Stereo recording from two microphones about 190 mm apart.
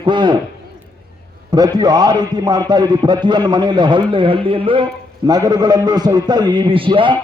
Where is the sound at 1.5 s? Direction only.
20° right (ahead or behind).